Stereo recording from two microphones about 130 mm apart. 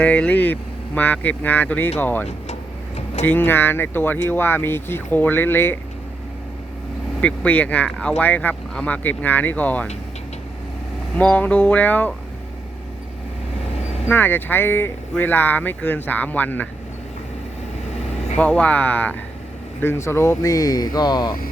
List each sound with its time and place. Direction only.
0.0 s speech: 10° left (ahead or behind)
2.2 s vehicle: 55° left (ahead or behind)
3.2 s speech: 15° left (ahead or behind)
7.2 s speech: 10° left (ahead or behind)
8.2 s speech: 15° left (ahead or behind)
11.2 s speech: 10° left (ahead or behind)
14.1 s speech: 15° left (ahead or behind)
18.3 s speech: 10° left (ahead or behind); by 21.3 s 35° left (ahead or behind)